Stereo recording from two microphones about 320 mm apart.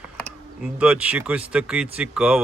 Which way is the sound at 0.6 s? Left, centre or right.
Centre.